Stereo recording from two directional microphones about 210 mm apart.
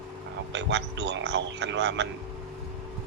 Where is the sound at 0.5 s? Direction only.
55° right (ahead or behind).